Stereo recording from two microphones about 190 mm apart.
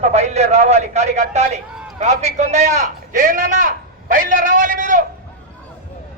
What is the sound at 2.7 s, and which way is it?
A man's voice, 45° right (ahead or behind).